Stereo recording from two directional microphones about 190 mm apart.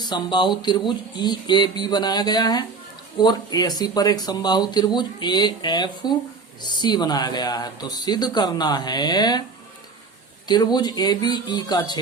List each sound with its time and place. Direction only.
0.0 s speech: 20° left (ahead or behind)
10.4 s speech: 20° left (ahead or behind)